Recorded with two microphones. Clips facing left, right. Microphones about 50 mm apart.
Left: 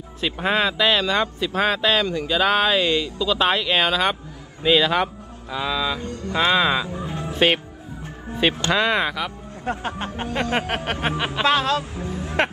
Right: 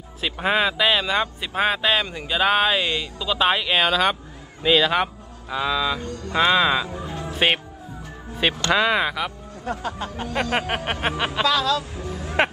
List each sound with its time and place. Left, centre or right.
0.2 s speech: centre
6.0 s speech: left
6.3 s speech: centre
6.9 s music: left
7.3 s speech: centre
8.4 s speech: centre
9.7 s speech: left
10.9 s speech: centre
11.4 s speech: left